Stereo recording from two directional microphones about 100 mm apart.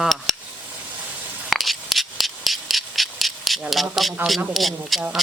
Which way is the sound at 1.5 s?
Centre (ahead or behind).